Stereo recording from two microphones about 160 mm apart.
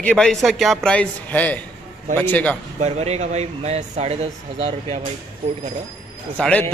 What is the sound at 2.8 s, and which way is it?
Speech, 45° right (ahead or behind).